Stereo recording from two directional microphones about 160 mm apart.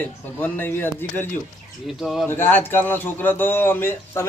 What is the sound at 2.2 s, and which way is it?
Speech, 15° left (ahead or behind).